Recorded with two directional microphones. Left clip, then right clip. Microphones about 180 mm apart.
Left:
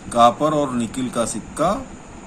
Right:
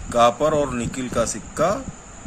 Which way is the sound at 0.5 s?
40° right (ahead or behind).